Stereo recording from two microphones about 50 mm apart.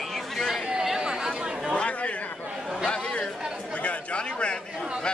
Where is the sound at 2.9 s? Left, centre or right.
Centre.